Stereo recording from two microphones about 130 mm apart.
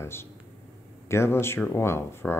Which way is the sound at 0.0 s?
20° left (ahead or behind).